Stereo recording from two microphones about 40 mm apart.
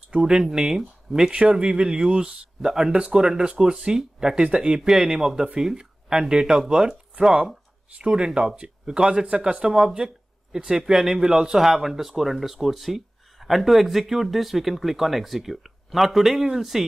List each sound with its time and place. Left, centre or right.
0.2 s speech: centre
1.3 s speech: right
4.6 s speech: centre; by 9.7 s right
9.7 s speech: centre